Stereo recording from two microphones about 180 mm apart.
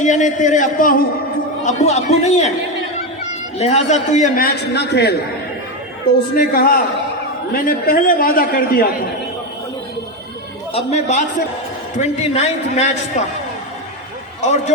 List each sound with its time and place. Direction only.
0.0 s a man's voice: 40° left (ahead or behind)
1.6 s a man's voice: 40° left (ahead or behind)
3.6 s a man's voice: 40° left (ahead or behind); by 5.1 s 70° left (ahead or behind)
6.3 s a man's voice: 55° left (ahead or behind)
10.7 s a man's voice: 35° left (ahead or behind)
14.4 s a man's voice: 40° left (ahead or behind)